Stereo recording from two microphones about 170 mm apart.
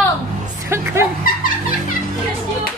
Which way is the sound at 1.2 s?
55° left (ahead or behind).